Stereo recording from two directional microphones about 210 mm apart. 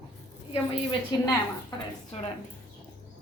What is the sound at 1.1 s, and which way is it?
Speech, 20° left (ahead or behind).